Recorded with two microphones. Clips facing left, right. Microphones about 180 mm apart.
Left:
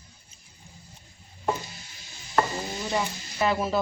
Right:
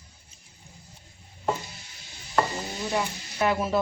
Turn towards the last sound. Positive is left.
turn(degrees=0)  # may be behind; listen again after turning